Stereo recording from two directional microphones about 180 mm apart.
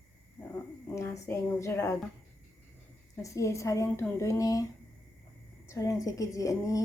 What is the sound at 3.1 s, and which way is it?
A woman's voice, 15° left (ahead or behind).